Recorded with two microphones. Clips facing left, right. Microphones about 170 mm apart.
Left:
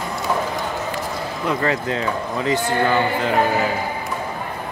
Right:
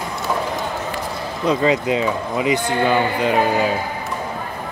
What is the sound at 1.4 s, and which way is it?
A man's voice, 15° right (ahead or behind).